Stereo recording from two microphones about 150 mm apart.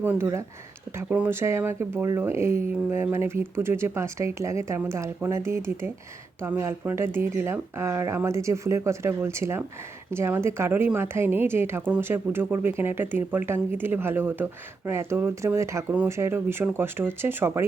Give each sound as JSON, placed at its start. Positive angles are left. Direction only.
{"t": 0.0, "sound": "speech", "side_deg": -15}